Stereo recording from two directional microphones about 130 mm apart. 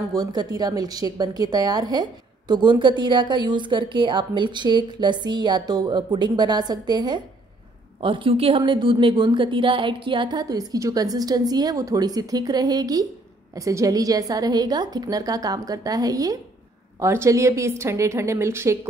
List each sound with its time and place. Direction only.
0.1 s a woman's voice: 30° right (ahead or behind)